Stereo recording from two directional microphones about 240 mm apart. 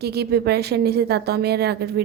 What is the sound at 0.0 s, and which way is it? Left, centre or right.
A woman's voice, right.